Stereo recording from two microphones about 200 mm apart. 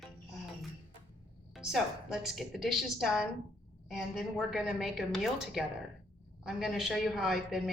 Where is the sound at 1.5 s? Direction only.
Centre (ahead or behind).